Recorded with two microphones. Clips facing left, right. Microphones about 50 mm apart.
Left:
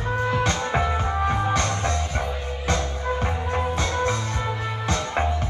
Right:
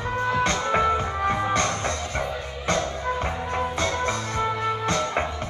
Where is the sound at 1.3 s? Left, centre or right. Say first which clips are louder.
Right 3 dB; right.